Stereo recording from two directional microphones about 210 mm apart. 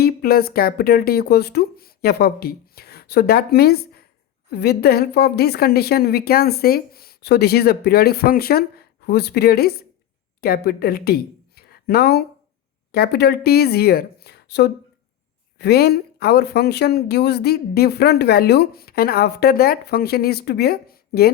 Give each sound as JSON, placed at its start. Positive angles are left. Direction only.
{"t": 0.0, "sound": "a woman's voice", "side_deg": 45}